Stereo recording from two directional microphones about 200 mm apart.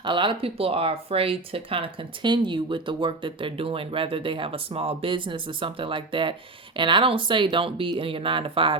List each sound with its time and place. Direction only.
0.0 s speech: 25° right (ahead or behind)